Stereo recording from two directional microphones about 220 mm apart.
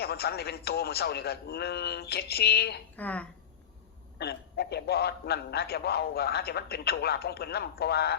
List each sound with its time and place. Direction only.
0.0 s a man's voice: 45° left (ahead or behind)
2.9 s a woman's voice: 5° left (ahead or behind)
4.2 s a man's voice: 45° left (ahead or behind)